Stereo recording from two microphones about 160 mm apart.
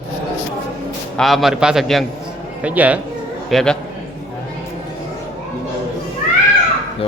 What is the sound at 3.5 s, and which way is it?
Speech, 5° left (ahead or behind).